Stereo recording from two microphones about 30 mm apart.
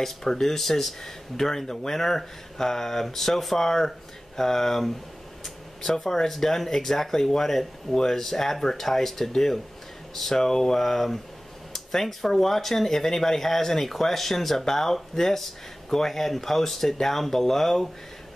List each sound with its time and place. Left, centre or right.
0.0 s speech: centre